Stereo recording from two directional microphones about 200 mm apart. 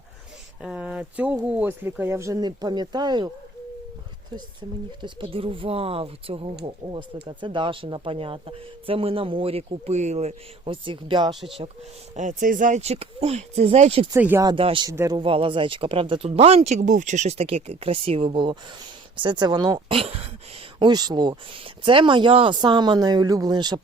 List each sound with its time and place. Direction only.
0.6 s a sound: 5° right (ahead or behind)
1.5 s speech: 10° right (ahead or behind)
5.0 s speech: 25° right (ahead or behind)
12.1 s speech: 40° right (ahead or behind)
14.1 s speech: 10° right (ahead or behind)
14.5 s speech: 25° right (ahead or behind)
15.2 s speech: 25° right (ahead or behind)